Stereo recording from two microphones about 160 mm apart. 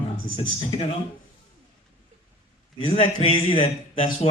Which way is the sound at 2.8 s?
35° left (ahead or behind).